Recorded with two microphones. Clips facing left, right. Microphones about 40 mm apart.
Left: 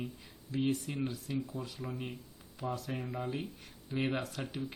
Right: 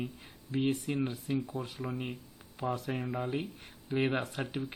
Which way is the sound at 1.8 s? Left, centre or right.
Right.